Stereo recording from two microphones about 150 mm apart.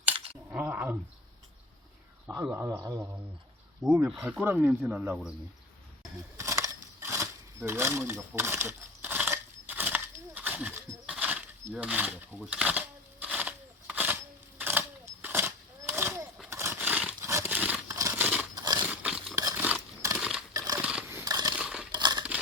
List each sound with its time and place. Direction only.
0.5 s speech: 10° right (ahead or behind)
2.2 s a man's voice: 10° right (ahead or behind); by 4.0 s 25° right (ahead or behind)
4.2 s speech: 10° right (ahead or behind)
6.3 s a sound: 20° right (ahead or behind)
17.9 s scissors: 20° right (ahead or behind)
18.5 s a sound: 25° right (ahead or behind)
18.8 s a sound: 10° right (ahead or behind)
20.5 s biting: 20° right (ahead or behind)
20.8 s a sound: 10° right (ahead or behind)
21.2 s crushing: 25° right (ahead or behind)
21.5 s crumpling: 5° right (ahead or behind)
21.9 s crumpling: 30° right (ahead or behind)